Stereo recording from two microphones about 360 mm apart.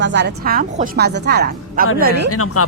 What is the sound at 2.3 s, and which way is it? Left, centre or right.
Speech, left.